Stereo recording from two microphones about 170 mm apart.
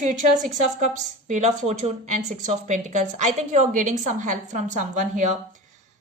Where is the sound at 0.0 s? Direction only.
45° right (ahead or behind).